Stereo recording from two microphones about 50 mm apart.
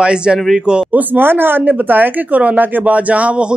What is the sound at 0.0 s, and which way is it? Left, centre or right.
Speech, centre.